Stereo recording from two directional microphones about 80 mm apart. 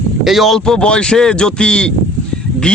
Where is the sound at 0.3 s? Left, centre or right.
Centre.